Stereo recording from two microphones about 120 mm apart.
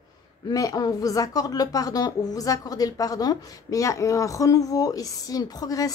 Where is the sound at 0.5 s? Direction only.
30° left (ahead or behind).